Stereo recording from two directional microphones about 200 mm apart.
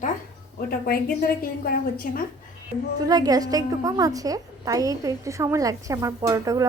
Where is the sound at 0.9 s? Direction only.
50° left (ahead or behind).